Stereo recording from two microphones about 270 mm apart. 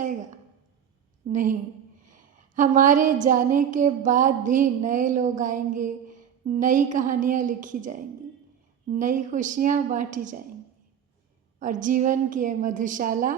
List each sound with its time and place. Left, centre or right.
1.3 s a woman's voice: right
2.0 s a sound: right
6.9 s a woman's voice: right
11.6 s a woman's voice: right